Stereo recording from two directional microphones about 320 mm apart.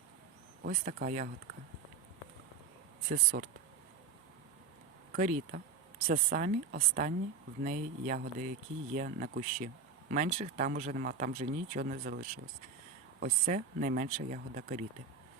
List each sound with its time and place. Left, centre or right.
0.6 s speech: right
3.3 s speech: right
5.1 s speech: right